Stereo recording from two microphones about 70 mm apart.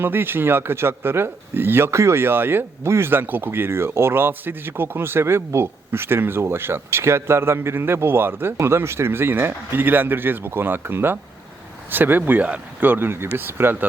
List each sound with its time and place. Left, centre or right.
0.0 s speech: right